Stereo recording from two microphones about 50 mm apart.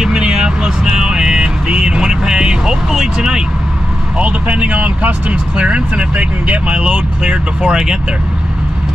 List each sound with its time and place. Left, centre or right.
0.0 s vehicle: centre
4.2 s speech: right